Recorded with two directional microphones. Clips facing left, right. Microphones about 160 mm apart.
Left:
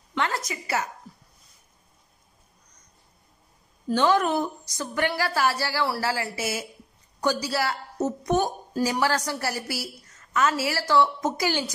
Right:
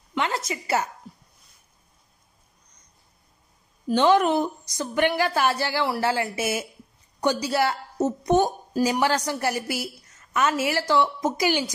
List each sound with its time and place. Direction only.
0.1 s a sound: 15° right (ahead or behind)
0.5 s a woman's voice: 25° right (ahead or behind)
3.8 s a woman's voice: 20° right (ahead or behind)